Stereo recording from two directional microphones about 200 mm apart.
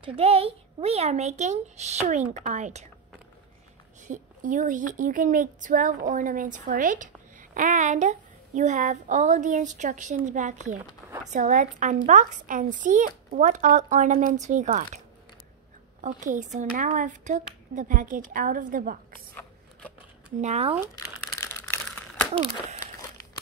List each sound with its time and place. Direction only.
0.0 s a woman's voice: 30° right (ahead or behind)
4.1 s a woman's voice: 40° right (ahead or behind)
16.0 s a woman's voice: 40° right (ahead or behind)
20.3 s a woman's voice: 35° right (ahead or behind)
20.9 s crumpling: 15° left (ahead or behind)